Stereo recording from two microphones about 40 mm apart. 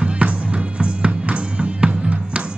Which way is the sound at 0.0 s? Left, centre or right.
Right.